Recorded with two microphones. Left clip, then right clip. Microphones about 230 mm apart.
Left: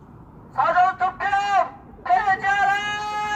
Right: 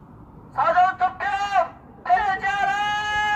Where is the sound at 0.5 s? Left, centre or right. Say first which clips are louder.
Even; right.